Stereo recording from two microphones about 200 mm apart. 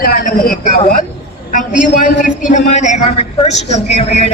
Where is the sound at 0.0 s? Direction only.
45° left (ahead or behind).